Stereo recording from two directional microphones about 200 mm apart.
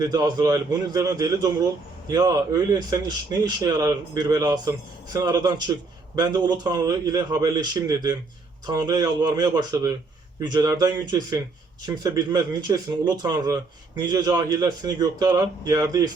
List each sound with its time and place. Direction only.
0.0 s speech: 20° right (ahead or behind)